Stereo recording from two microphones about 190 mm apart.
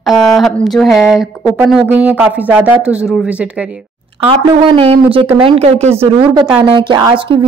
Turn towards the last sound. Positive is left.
turn(degrees=-25)  # may be behind; listen again after turning